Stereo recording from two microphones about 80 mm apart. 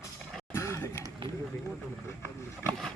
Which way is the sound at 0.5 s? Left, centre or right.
Left.